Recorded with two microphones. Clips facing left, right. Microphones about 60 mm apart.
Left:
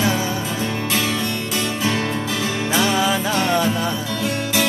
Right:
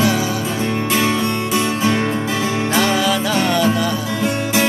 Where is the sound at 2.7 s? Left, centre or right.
Centre.